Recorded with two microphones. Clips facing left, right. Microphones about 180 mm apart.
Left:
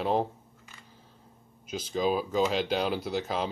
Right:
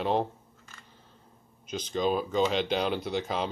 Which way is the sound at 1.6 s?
5° left (ahead or behind).